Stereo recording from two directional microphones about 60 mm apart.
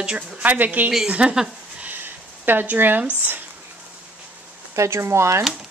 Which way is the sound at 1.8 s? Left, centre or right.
Right.